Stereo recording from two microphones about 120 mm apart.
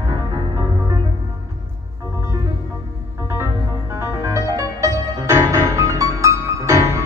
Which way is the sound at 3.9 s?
25° right (ahead or behind).